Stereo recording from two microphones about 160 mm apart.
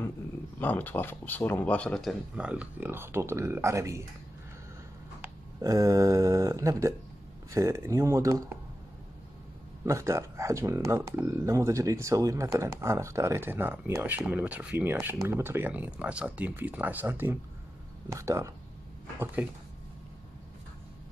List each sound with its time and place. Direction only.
0.6 s speech: 10° left (ahead or behind); by 4.0 s 20° right (ahead or behind)
5.2 s speech: 20° right (ahead or behind)
9.8 s speech: 20° right (ahead or behind)